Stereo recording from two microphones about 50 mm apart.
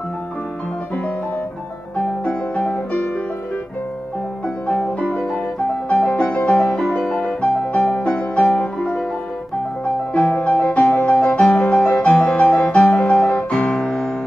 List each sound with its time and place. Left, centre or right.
2.2 s music: left
4.6 s music: centre
6.0 s music: left
6.5 s music: centre
10.3 s music: centre
10.6 s music: left
11.6 s music: left
12.0 s music: centre
12.9 s music: left
13.5 s music: centre